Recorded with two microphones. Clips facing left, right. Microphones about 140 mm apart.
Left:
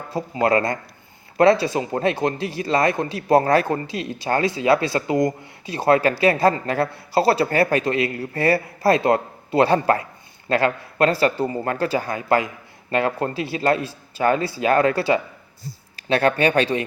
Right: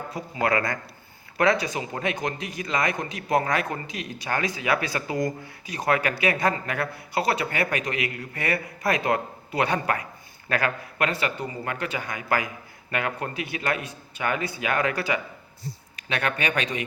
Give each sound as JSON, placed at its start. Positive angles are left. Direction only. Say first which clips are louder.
{"t": 0.1, "sound": "speech", "louder": "left 6 dB", "side_deg": 25}